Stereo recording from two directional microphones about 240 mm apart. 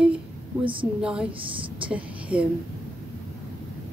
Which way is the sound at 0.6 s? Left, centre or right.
Right.